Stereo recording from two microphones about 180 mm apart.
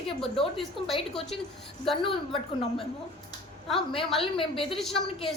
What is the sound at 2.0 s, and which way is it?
Speech, 30° left (ahead or behind).